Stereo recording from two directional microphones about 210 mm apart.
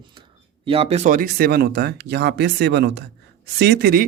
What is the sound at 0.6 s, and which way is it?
Speech, 30° right (ahead or behind).